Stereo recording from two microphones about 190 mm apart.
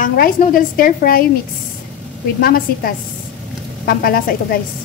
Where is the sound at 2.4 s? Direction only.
50° left (ahead or behind).